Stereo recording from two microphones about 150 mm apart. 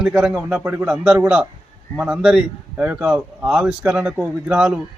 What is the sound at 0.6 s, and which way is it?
Speech, 15° right (ahead or behind).